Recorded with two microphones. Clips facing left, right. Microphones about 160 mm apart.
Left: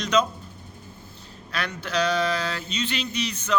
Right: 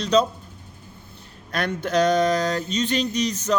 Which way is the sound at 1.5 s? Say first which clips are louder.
Right 5 dB; 50° right (ahead or behind).